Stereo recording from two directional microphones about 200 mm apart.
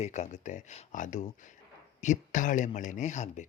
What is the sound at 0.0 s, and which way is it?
Speech, 35° left (ahead or behind).